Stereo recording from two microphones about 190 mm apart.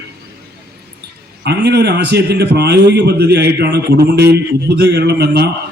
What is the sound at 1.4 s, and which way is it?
A man's voice, 60° right (ahead or behind).